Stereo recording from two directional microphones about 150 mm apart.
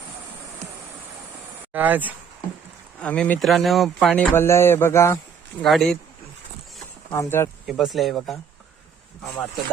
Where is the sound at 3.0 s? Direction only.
5° left (ahead or behind).